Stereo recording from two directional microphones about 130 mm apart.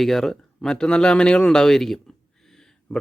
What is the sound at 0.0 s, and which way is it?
Speech, centre (ahead or behind).